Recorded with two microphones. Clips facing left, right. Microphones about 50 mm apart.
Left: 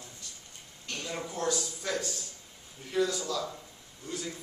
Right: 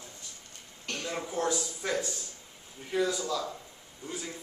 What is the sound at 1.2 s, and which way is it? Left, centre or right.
A man's voice, centre.